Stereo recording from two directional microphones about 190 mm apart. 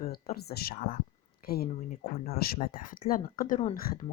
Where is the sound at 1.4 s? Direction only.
50° left (ahead or behind).